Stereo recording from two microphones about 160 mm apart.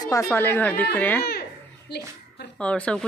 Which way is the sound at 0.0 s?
20° left (ahead or behind).